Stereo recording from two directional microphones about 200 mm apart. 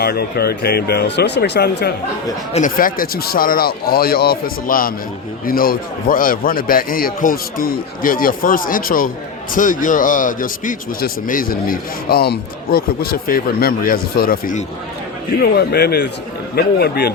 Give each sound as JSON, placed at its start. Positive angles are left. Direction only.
{"t": 0.0, "sound": "speech", "side_deg": 50}
{"t": 2.5, "sound": "speech", "side_deg": 40}